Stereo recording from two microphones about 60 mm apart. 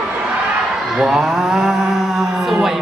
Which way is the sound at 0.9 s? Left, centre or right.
Centre.